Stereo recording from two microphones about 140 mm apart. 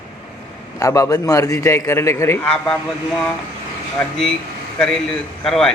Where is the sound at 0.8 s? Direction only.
25° left (ahead or behind).